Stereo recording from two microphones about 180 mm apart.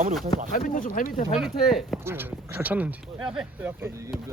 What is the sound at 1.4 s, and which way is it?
Speech, centre (ahead or behind).